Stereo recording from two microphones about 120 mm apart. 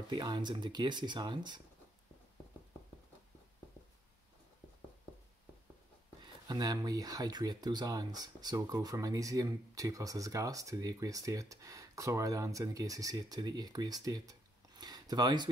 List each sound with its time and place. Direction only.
0.1 s speech: 40° right (ahead or behind)
6.2 s speech: 35° right (ahead or behind)